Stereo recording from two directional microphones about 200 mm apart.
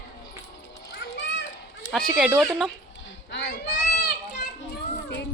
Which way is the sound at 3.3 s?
60° left (ahead or behind).